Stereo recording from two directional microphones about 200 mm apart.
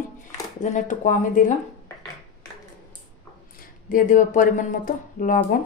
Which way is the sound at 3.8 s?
40° left (ahead or behind).